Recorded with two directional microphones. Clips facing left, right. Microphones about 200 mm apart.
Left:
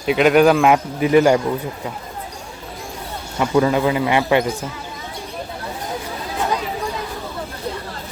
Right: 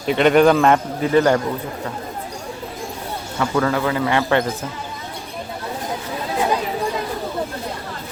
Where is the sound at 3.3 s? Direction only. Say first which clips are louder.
Left 3 dB; 15° left (ahead or behind).